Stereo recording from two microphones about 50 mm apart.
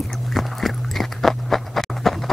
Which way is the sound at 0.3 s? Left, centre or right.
Centre.